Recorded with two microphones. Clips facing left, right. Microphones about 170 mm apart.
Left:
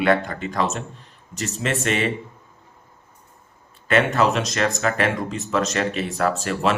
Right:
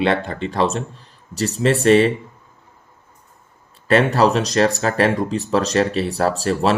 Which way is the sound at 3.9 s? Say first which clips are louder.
Right 4 dB; 35° right (ahead or behind).